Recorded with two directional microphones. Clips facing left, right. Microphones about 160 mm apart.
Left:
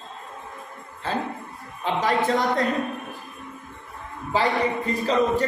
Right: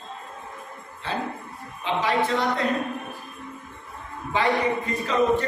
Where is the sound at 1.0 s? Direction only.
45° left (ahead or behind).